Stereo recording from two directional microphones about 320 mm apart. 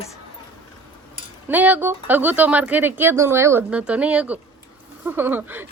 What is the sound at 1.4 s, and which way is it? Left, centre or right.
A woman's voice, centre.